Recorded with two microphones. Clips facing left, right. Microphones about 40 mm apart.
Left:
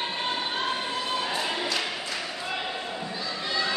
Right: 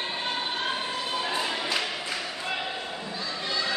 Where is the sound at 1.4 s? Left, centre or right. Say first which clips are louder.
Left 1 dB; centre.